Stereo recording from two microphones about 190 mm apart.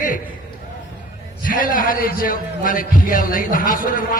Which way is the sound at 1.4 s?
45° left (ahead or behind).